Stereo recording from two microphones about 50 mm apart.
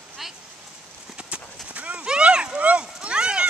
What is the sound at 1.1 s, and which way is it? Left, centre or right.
Clip-clop, right.